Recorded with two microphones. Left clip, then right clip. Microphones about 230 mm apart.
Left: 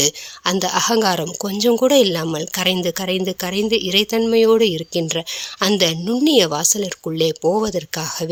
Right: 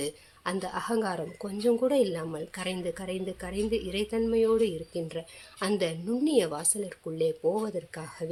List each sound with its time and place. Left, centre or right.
0.0 s a woman's voice: left